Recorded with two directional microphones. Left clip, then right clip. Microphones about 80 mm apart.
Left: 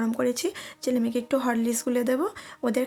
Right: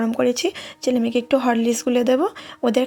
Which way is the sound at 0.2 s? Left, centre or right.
Right.